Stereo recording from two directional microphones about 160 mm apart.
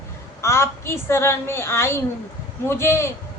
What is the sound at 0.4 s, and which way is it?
A woman's voice, 15° left (ahead or behind).